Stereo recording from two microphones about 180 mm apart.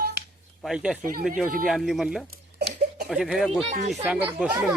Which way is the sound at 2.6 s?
60° right (ahead or behind).